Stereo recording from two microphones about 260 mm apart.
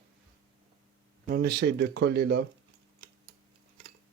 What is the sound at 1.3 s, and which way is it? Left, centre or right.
Speech, right.